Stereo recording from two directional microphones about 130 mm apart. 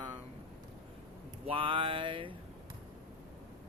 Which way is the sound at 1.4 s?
45° right (ahead or behind).